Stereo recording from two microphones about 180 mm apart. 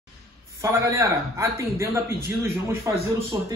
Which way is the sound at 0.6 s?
15° right (ahead or behind).